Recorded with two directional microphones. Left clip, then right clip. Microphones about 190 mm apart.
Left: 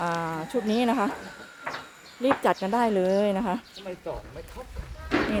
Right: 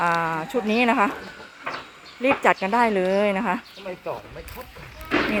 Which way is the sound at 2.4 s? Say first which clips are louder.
Right 5 dB; 5° left (ahead or behind).